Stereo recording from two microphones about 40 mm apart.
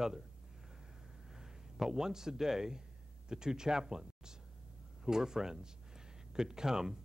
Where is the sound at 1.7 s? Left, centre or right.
Centre.